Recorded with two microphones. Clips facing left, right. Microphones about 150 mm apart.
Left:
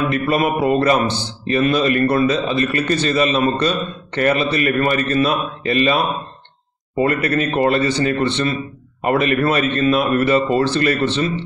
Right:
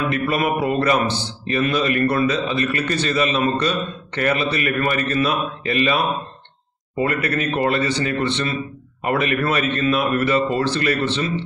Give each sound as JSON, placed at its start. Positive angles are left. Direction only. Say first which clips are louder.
{"t": 0.1, "sound": "a man's voice", "louder": "left 3 dB", "side_deg": 30}
{"t": 7.0, "sound": "a man's voice", "louder": "left 4 dB", "side_deg": 35}